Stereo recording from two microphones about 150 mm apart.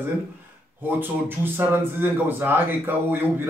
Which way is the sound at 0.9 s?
15° right (ahead or behind).